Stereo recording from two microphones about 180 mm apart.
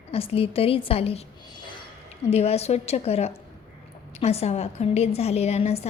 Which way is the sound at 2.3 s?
35° left (ahead or behind).